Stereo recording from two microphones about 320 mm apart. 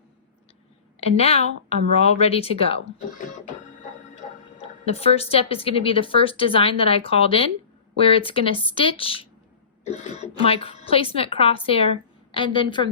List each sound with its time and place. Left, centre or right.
0.9 s a woman's voice: centre
4.6 s speech: centre